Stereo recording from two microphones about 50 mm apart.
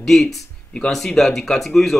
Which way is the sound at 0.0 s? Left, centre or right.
Centre.